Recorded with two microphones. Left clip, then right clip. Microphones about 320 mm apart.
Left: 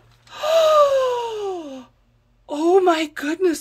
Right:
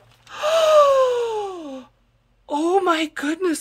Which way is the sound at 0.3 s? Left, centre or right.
Centre.